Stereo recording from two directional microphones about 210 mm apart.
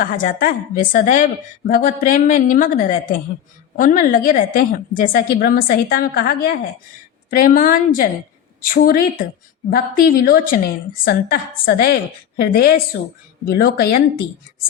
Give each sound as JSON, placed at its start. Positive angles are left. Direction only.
{"t": 0.0, "sound": "a woman's voice", "side_deg": 40}